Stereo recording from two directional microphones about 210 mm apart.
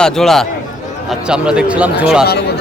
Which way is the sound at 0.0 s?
Centre (ahead or behind).